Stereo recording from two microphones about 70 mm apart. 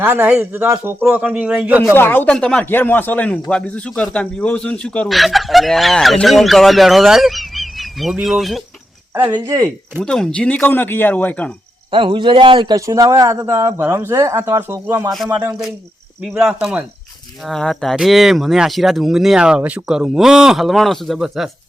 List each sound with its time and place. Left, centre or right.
0.0 s a man's voice: right
2.0 s speech: left
2.2 s speech: centre
2.6 s speech: left
5.0 s speech: centre
9.1 s a man's voice: right
10.0 s speech: centre
12.0 s a man's voice: right
12.8 s speech: right
13.7 s speech: right
16.2 s speech: centre
17.4 s speech: centre